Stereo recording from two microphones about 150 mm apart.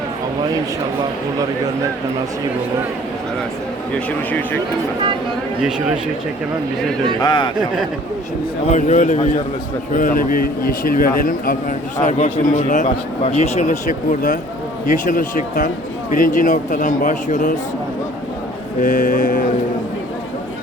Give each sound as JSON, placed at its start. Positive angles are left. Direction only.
{"t": 3.9, "sound": "speech", "side_deg": 10}
{"t": 7.2, "sound": "a man's voice", "side_deg": 30}
{"t": 8.7, "sound": "a man's voice", "side_deg": 50}
{"t": 11.9, "sound": "speech", "side_deg": 55}
{"t": 18.8, "sound": "speech", "side_deg": 55}